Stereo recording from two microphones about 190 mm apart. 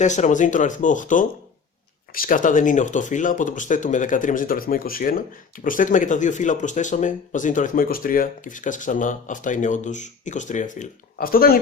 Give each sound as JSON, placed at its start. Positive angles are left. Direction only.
{"t": 0.0, "sound": "speech", "side_deg": 40}